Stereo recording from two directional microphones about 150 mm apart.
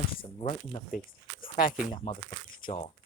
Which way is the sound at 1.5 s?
65° left (ahead or behind).